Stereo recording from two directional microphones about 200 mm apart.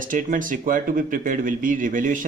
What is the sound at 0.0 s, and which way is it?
Speech, 40° right (ahead or behind).